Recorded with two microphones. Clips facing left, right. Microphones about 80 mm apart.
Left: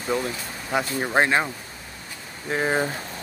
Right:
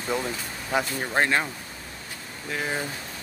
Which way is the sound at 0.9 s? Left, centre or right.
Centre.